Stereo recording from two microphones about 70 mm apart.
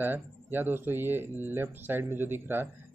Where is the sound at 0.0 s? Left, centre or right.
Right.